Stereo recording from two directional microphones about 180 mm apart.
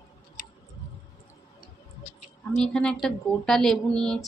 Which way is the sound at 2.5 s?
5° left (ahead or behind).